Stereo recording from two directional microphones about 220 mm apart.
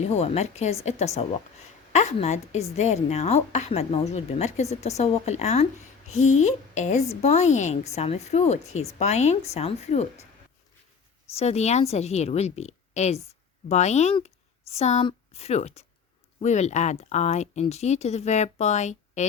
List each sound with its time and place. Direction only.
0.0 s a woman's voice: 30° left (ahead or behind)
11.3 s a woman's voice: 30° left (ahead or behind)